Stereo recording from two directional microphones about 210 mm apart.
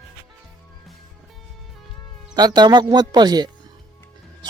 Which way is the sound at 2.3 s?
20° right (ahead or behind).